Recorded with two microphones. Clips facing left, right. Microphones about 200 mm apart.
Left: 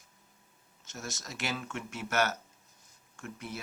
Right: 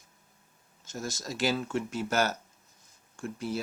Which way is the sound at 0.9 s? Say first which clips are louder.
Right 6 dB; 30° right (ahead or behind).